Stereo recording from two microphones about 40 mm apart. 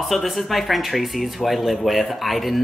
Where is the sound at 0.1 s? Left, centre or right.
Centre.